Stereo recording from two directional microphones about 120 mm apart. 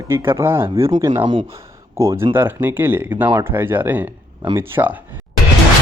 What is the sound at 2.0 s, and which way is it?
Speech, 25° right (ahead or behind).